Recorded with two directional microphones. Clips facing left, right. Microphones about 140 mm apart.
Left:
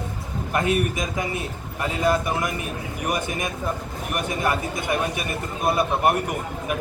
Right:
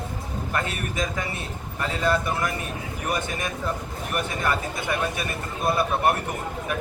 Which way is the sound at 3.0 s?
15° left (ahead or behind).